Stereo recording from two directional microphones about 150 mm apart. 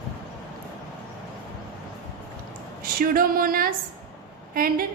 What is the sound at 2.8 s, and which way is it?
A woman's voice, 75° right (ahead or behind).